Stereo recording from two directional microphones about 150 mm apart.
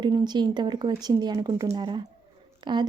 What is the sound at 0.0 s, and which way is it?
A woman's voice, 30° right (ahead or behind).